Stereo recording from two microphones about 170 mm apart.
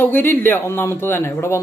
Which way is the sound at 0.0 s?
10° left (ahead or behind).